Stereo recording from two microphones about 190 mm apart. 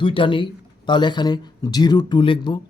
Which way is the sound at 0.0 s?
25° left (ahead or behind).